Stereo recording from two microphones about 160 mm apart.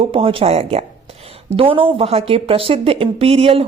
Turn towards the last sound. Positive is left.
turn(degrees=-40)  # may be behind; listen again after turning